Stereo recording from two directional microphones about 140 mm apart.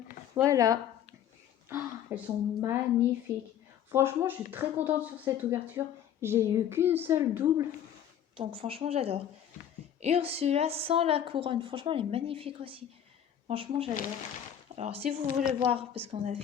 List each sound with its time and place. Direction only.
0.4 s speech: 25° right (ahead or behind)
1.7 s a sound: 15° right (ahead or behind)
2.6 s speech: 20° right (ahead or behind)
8.4 s a woman's voice: 40° right (ahead or behind)